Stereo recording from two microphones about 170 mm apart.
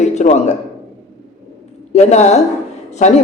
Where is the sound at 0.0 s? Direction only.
45° left (ahead or behind).